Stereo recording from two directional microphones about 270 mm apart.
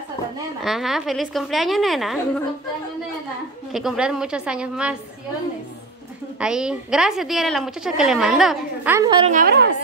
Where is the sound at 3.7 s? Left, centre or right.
Centre.